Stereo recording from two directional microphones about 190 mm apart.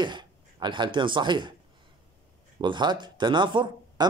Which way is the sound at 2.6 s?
25° right (ahead or behind).